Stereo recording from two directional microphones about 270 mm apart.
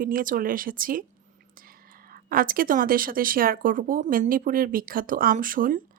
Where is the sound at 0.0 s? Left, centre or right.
Right.